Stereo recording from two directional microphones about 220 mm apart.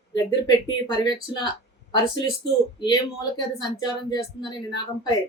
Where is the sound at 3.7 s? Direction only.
20° left (ahead or behind).